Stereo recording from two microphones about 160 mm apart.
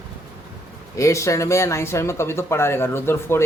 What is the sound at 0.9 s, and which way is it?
A man's voice, 20° left (ahead or behind).